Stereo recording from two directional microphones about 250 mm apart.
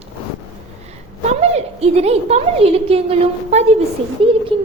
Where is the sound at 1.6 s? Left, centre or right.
Right.